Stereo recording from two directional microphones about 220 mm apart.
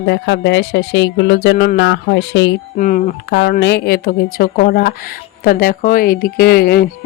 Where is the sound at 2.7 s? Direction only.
35° left (ahead or behind).